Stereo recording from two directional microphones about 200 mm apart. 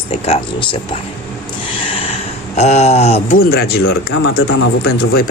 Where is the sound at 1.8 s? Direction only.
30° left (ahead or behind).